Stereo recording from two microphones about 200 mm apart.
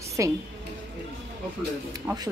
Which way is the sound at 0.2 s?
15° right (ahead or behind).